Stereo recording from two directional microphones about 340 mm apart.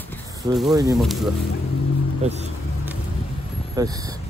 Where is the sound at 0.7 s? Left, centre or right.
Centre.